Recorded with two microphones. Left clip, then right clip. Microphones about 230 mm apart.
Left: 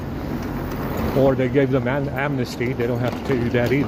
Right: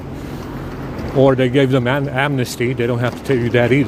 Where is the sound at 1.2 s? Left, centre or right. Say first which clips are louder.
Right 5 dB; right.